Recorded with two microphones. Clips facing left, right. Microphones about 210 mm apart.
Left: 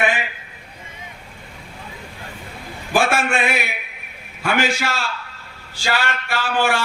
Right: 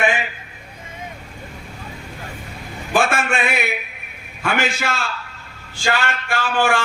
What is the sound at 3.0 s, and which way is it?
Speech, 55° right (ahead or behind).